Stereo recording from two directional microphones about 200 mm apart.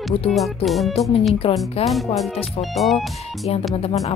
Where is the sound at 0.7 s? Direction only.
Centre (ahead or behind).